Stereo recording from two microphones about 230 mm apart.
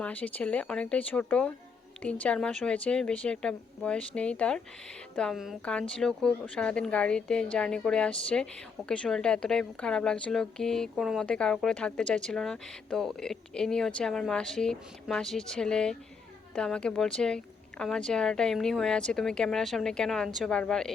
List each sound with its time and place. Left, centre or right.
0.0 s a woman's voice: centre